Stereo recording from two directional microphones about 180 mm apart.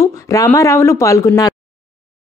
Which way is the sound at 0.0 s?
20° left (ahead or behind).